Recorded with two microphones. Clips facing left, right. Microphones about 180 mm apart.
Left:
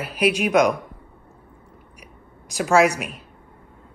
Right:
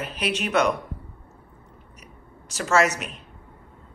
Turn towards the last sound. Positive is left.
turn(degrees=10)  # may be behind; listen again after turning